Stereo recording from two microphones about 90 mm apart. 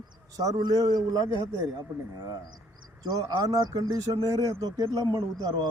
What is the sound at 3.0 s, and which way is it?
A man's voice, 50° right (ahead or behind).